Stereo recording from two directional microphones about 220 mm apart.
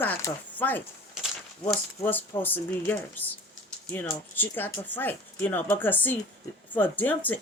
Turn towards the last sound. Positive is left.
turn(degrees=10)  # may be behind; listen again after turning